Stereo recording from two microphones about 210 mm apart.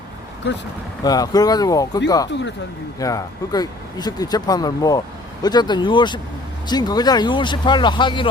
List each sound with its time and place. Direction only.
1.0 s speech: 20° left (ahead or behind)